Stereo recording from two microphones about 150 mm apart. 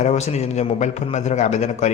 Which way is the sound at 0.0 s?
45° left (ahead or behind).